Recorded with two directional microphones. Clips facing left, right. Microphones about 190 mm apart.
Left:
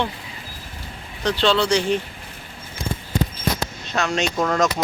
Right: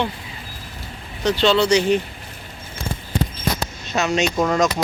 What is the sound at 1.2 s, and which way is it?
Speech, 10° right (ahead or behind).